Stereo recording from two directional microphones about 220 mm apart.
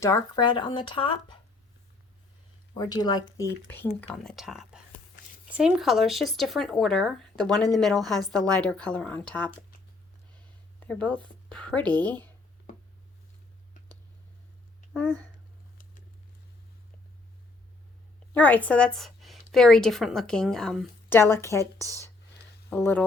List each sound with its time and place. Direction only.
0.0 s speech: 15° left (ahead or behind)
2.7 s speech: 20° left (ahead or behind)
10.8 s speech: 5° left (ahead or behind)
18.3 s a woman's voice: 5° left (ahead or behind)
22.7 s speech: 10° left (ahead or behind)